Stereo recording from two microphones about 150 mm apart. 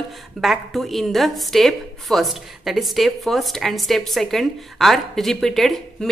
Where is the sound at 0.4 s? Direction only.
Centre (ahead or behind).